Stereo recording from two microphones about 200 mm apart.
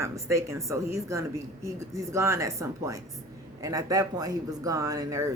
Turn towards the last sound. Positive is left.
turn(degrees=-15)  # may be behind; listen again after turning